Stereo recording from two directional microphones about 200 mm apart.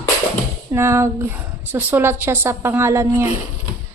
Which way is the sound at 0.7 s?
15° right (ahead or behind).